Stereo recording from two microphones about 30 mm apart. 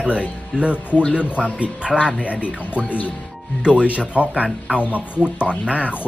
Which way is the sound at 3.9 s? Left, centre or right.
Right.